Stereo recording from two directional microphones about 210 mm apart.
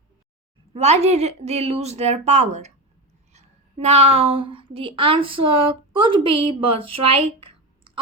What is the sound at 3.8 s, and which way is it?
Speech, 30° right (ahead or behind).